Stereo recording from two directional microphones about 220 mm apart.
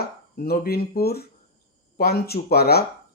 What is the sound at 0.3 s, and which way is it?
Speech, 45° left (ahead or behind).